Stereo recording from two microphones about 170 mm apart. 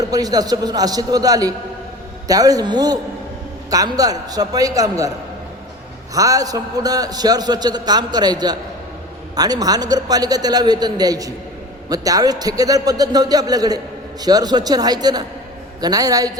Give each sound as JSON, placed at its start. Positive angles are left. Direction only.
{"t": 0.0, "sound": "a man's voice", "side_deg": -20}
{"t": 6.1, "sound": "a man's voice", "side_deg": -20}